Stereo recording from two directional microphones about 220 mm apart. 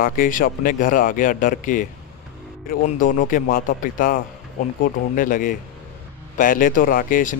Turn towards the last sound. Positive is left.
turn(degrees=40)  # may be behind; listen again after turning